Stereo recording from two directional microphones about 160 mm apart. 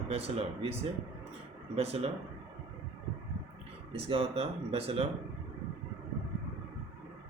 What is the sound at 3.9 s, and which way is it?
Speech, 40° right (ahead or behind).